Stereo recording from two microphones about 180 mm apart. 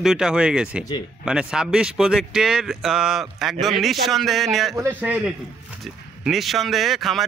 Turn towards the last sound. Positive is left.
turn(degrees=0)  # may be behind; listen again after turning